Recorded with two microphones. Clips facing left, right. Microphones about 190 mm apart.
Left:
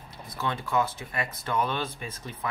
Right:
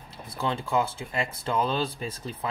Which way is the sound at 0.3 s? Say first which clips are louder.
Right 2 dB; 30° right (ahead or behind).